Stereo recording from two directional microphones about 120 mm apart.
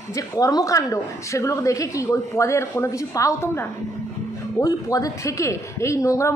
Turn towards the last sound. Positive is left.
turn(degrees=25)  # may be behind; listen again after turning